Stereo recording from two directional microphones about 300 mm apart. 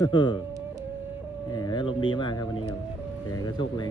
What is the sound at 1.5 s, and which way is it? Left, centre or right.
Speech, centre.